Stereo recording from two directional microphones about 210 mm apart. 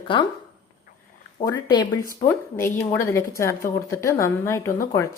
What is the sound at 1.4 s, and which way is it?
Speech, 20° left (ahead or behind).